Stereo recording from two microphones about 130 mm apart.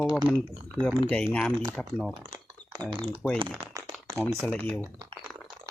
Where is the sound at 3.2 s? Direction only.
Centre (ahead or behind).